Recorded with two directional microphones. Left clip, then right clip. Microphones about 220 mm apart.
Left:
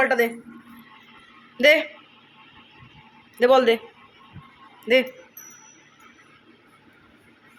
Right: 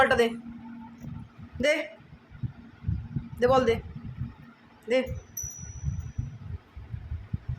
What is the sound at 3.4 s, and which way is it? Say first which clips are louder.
Speech: left 6 dB; 20° left (ahead or behind).